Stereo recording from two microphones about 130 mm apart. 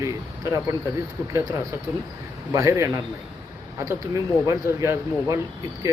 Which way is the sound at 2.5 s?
25° right (ahead or behind).